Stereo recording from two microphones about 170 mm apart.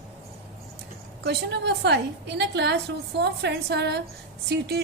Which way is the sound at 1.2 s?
80° right.